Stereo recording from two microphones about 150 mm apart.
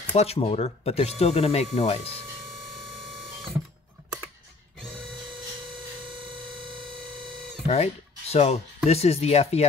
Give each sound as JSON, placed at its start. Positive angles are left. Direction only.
{"t": 0.1, "sound": "speech", "side_deg": 45}
{"t": 7.6, "sound": "speech", "side_deg": 45}